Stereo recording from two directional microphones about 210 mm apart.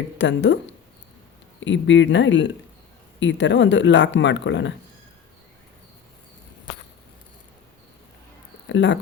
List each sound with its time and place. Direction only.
0.2 s speech: 55° left (ahead or behind)
1.6 s speech: 60° left (ahead or behind)
8.7 s speech: 60° left (ahead or behind)